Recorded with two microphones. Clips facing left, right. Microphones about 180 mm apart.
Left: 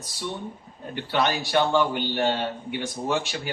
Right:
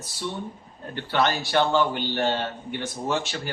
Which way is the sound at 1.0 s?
10° left (ahead or behind).